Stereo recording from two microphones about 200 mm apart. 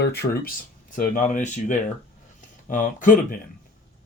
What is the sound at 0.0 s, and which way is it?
Speech, 55° left (ahead or behind).